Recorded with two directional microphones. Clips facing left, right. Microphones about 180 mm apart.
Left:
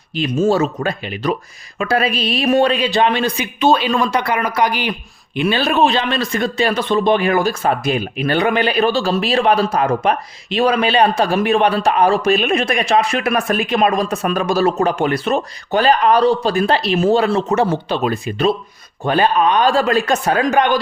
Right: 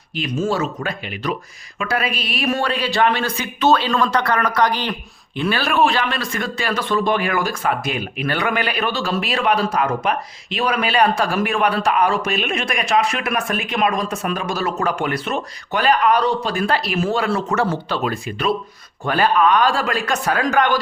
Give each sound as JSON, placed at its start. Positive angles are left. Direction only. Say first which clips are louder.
{"t": 0.2, "sound": "speech", "louder": "left 6 dB", "side_deg": 30}